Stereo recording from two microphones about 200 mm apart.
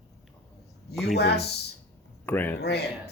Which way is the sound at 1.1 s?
55° left (ahead or behind).